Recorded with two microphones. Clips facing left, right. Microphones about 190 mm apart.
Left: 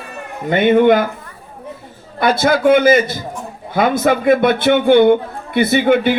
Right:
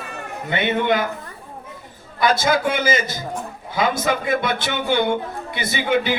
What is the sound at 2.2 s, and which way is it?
Speech, 60° left (ahead or behind).